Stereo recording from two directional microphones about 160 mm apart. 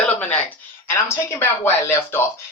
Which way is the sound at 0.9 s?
15° left (ahead or behind).